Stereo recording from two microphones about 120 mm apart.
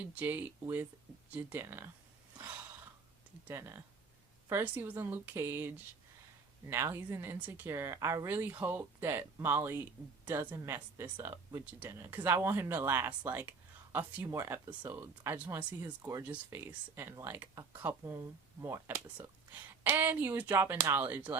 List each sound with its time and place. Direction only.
0.0 s speech: 15° right (ahead or behind)
3.4 s speech: 20° right (ahead or behind)
8.3 s speech: 15° right (ahead or behind)
15.8 s speech: 25° right (ahead or behind)
16.2 s speech: 15° right (ahead or behind)